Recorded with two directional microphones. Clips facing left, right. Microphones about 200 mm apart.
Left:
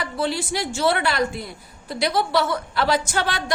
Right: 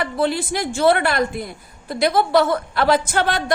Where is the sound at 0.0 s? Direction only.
55° right (ahead or behind).